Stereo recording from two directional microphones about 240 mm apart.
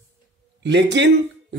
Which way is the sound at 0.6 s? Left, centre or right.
Right.